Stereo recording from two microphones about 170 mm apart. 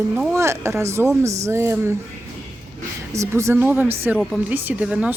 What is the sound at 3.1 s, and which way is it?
Speech, 15° right (ahead or behind).